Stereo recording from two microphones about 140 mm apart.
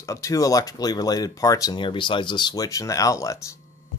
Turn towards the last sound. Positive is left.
turn(degrees=25)  # may be behind; listen again after turning